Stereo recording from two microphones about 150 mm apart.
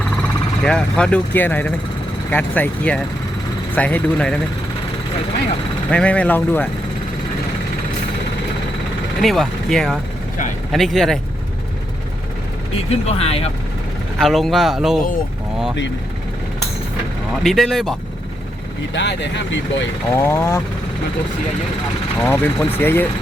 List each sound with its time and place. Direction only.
0.2 s speech: 5° left (ahead or behind)
5.9 s speech: 5° left (ahead or behind)
9.2 s speech: centre (ahead or behind)
12.7 s speech: 45° left (ahead or behind)
14.2 s speech: centre (ahead or behind)
17.4 s speech: centre (ahead or behind)
20.1 s speech: 15° left (ahead or behind)
22.2 s speech: 15° left (ahead or behind)